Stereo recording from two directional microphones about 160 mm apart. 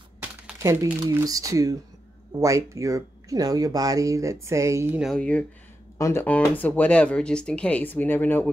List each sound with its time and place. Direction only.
0.2 s speech: 15° right (ahead or behind)
5.0 s speech: 5° left (ahead or behind)
5.9 s speech: 15° left (ahead or behind)